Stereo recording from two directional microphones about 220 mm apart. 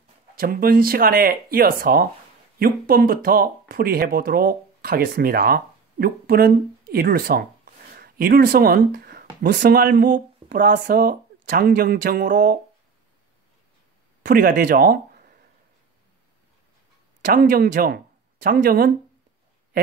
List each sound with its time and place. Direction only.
0.4 s speech: 40° right (ahead or behind)
14.2 s speech: 40° right (ahead or behind)
17.2 s speech: 40° right (ahead or behind)